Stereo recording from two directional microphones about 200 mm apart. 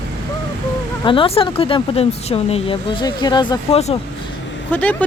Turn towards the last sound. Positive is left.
turn(degrees=10)  # may be behind; listen again after turning